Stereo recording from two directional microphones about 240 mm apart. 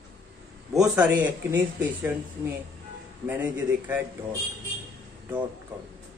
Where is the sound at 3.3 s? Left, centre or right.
Centre.